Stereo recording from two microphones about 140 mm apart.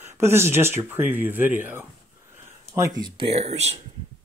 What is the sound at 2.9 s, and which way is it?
Speech, 30° right (ahead or behind).